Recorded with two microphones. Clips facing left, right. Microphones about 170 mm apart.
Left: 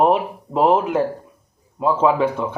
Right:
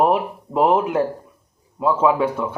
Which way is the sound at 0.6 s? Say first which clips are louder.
Left 1 dB; 15° right (ahead or behind).